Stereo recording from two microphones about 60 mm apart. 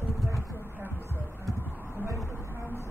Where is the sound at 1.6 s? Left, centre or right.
Left.